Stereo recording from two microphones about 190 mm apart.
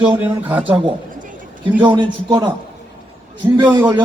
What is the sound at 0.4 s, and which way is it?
Speech, 10° right (ahead or behind).